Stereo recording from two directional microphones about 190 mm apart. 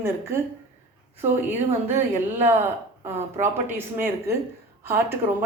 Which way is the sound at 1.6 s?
35° right (ahead or behind).